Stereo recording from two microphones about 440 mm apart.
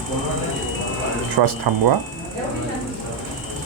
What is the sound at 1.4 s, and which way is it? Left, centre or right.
Speech, right.